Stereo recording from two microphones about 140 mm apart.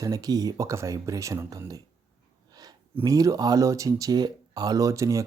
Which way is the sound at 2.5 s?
30° right (ahead or behind).